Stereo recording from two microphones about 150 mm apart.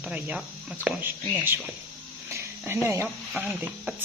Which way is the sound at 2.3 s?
15° right (ahead or behind).